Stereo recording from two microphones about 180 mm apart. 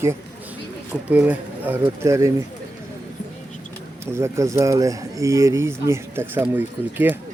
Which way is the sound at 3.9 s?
15° right (ahead or behind).